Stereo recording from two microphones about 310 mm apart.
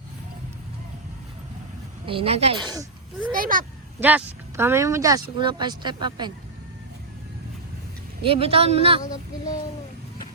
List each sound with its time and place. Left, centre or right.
2.0 s speech: centre
3.3 s speech: right
4.0 s speech: centre
8.2 s speech: centre